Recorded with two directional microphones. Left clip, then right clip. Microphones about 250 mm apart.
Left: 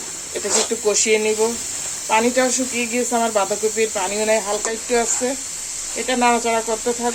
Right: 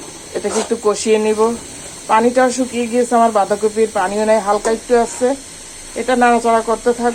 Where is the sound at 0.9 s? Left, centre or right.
Centre.